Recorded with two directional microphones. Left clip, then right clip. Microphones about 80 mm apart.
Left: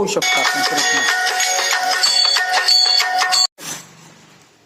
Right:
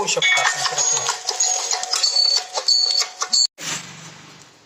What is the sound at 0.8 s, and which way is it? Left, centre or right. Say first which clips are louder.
Music: left 7 dB; left.